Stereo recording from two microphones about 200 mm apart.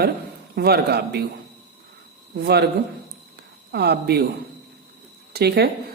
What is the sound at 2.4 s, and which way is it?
Speech, 55° right (ahead or behind).